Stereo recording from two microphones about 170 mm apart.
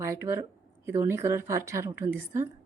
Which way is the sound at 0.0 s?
15° right (ahead or behind).